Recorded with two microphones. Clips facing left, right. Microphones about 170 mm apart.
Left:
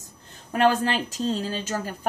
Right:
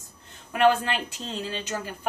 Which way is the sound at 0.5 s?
40° left (ahead or behind).